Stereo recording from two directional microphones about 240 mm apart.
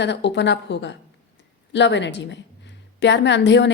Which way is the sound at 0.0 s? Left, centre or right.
Left.